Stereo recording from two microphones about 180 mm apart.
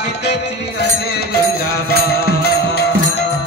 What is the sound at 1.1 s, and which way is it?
Music, 60° left (ahead or behind).